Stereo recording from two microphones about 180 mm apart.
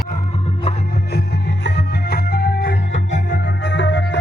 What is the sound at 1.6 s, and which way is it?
Music, 65° left (ahead or behind).